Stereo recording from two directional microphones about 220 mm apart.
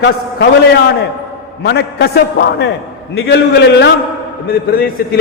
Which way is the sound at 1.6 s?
50° left (ahead or behind).